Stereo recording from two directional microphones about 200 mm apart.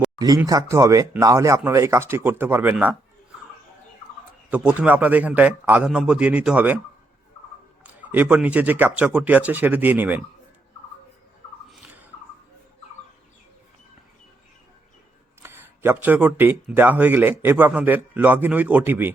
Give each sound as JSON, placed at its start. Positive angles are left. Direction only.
{"t": 0.2, "sound": "speech", "side_deg": -20}
{"t": 4.4, "sound": "speech", "side_deg": -5}
{"t": 7.9, "sound": "speech", "side_deg": -10}
{"t": 11.7, "sound": "bird", "side_deg": -5}
{"t": 15.4, "sound": "speech", "side_deg": -10}